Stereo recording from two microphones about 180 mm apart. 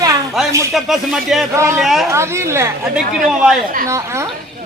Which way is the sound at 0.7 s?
Centre (ahead or behind).